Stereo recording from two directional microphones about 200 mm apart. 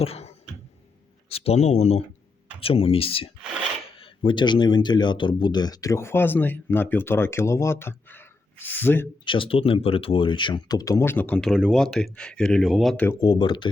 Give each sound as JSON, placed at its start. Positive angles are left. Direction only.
{"t": 0.0, "sound": "a sound", "side_deg": 30}
{"t": 1.3, "sound": "speech", "side_deg": 30}
{"t": 9.2, "sound": "speech", "side_deg": 25}
{"t": 13.2, "sound": "speech", "side_deg": 20}